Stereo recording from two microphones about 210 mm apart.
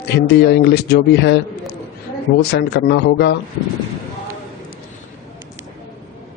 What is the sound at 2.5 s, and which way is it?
Speech, 50° left (ahead or behind).